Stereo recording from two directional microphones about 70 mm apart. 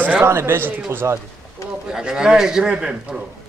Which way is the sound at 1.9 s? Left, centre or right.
Centre.